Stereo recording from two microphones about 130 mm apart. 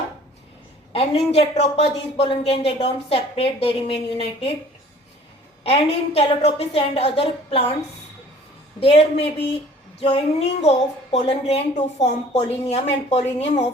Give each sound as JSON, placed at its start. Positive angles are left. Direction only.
{"t": 0.9, "sound": "a woman's voice", "side_deg": 55}
{"t": 5.6, "sound": "a woman's voice", "side_deg": 50}
{"t": 8.8, "sound": "a woman's voice", "side_deg": 50}